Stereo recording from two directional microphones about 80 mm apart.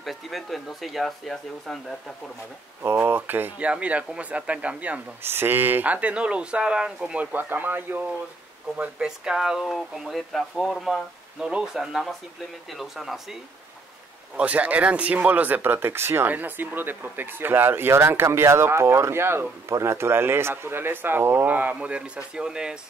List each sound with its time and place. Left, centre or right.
0.0 s speech: centre
2.8 s speech: right
5.2 s speech: right; by 7.2 s centre
7.3 s speech: right
8.7 s speech: centre
14.3 s speech: centre